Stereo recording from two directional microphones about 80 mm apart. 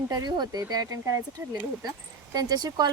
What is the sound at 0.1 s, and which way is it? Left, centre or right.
Speech, right.